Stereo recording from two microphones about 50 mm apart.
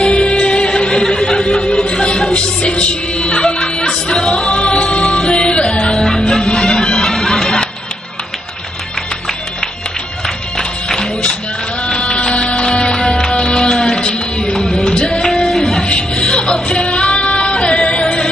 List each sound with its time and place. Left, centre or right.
0.1 s music: left
0.5 s music: centre
1.0 s a sound: centre
1.9 s music: left
5.9 s music: centre
10.2 s music: centre
12.9 s music: centre
14.0 s music: left
14.5 s music: centre
15.8 s music: centre
16.9 s music: centre